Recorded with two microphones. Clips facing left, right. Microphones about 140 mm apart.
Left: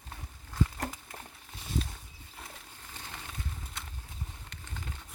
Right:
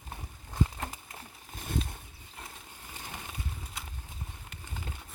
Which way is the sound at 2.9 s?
15° right (ahead or behind).